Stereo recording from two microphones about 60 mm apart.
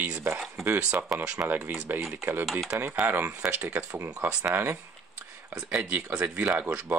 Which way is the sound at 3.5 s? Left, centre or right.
Right.